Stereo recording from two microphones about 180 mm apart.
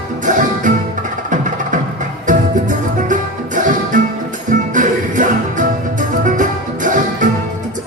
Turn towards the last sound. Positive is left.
turn(degrees=-45)  # may be behind; listen again after turning